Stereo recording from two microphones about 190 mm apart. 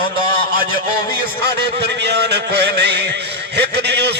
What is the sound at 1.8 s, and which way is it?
A man's voice, 60° right (ahead or behind).